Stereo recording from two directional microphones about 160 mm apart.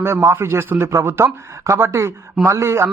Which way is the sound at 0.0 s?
15° right (ahead or behind).